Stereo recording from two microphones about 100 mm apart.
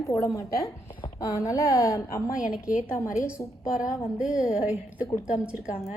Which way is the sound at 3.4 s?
35° left (ahead or behind).